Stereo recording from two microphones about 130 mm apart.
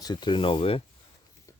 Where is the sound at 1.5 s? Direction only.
25° left (ahead or behind).